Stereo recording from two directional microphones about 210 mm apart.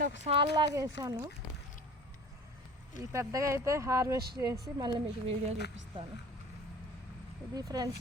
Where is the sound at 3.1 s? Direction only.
15° right (ahead or behind).